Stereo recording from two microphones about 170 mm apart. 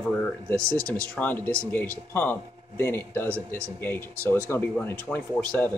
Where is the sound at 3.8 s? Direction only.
10° left (ahead or behind).